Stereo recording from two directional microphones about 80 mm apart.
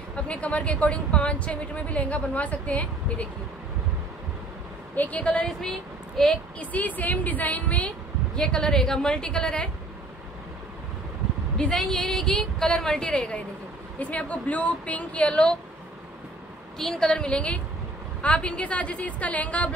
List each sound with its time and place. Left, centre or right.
0.1 s a woman's voice: centre
4.9 s a woman's voice: centre
6.6 s a woman's voice: centre
11.5 s a woman's voice: centre
16.7 s a woman's voice: centre